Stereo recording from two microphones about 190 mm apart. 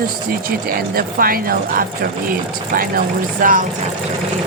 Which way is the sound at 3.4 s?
45° right (ahead or behind).